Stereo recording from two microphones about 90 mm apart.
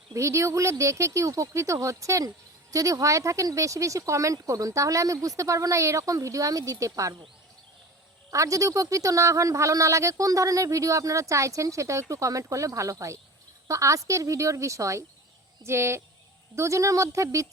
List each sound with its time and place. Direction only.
0.1 s a woman's voice: 35° right (ahead or behind)
8.3 s a woman's voice: 35° right (ahead or behind)